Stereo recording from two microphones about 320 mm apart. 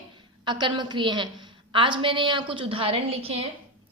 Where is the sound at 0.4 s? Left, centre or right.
Centre.